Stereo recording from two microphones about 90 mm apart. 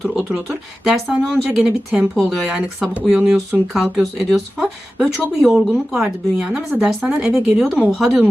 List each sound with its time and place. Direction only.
0.9 s a woman's voice: 5° right (ahead or behind)
2.9 s a woman's voice: 15° right (ahead or behind)